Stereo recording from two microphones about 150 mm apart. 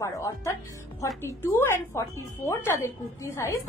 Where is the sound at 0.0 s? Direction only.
20° left (ahead or behind).